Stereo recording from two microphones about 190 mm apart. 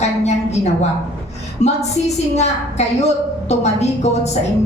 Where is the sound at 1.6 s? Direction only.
35° left (ahead or behind).